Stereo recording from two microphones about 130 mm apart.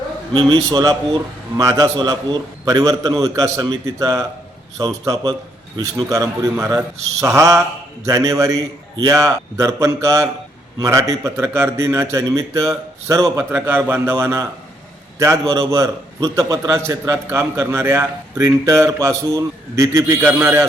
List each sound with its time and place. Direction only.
0.3 s a man's voice: 30° right (ahead or behind)